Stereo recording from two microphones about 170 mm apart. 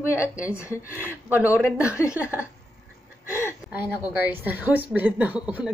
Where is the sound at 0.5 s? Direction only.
15° left (ahead or behind).